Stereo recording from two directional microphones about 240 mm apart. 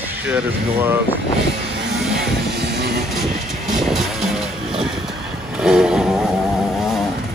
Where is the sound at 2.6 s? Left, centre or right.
Right.